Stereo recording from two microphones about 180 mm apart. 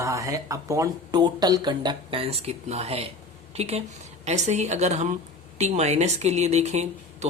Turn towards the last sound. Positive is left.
turn(degrees=-35)  # may be behind; listen again after turning